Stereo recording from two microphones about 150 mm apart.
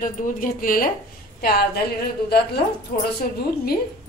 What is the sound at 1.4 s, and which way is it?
Speech, 90° left.